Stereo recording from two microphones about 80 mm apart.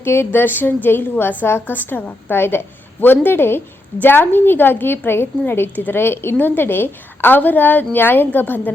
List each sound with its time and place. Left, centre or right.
0.0 s a woman's voice: left